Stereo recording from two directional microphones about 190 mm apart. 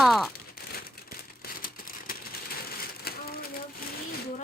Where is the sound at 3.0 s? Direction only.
55° left (ahead or behind).